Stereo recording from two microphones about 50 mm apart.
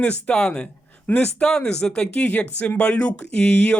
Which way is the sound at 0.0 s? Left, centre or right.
Left.